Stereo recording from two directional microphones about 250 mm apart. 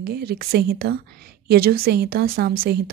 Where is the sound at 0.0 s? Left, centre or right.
Right.